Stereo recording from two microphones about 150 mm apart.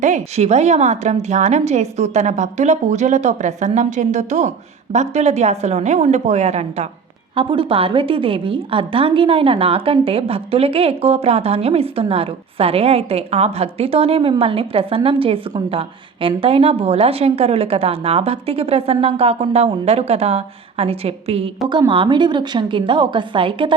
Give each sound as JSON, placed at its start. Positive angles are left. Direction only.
{"t": 0.0, "sound": "a woman's voice", "side_deg": -50}